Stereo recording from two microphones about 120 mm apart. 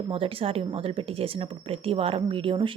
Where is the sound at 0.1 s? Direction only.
50° right (ahead or behind).